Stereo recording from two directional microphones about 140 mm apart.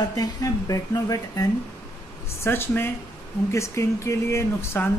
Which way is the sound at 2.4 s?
15° left (ahead or behind).